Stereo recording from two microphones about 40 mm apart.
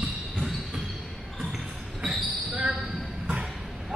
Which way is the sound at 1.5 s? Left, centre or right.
Centre.